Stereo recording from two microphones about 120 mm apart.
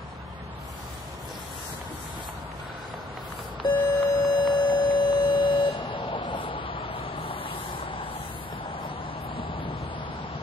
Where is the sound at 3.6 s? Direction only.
35° left (ahead or behind).